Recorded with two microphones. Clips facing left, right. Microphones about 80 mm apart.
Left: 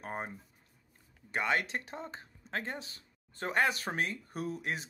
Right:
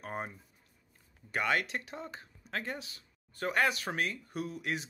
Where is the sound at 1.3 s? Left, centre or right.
Left.